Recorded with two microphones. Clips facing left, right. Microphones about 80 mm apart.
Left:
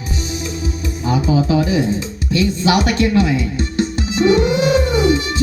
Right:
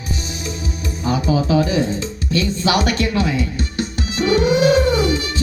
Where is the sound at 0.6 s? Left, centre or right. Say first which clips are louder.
Left 2 dB; left.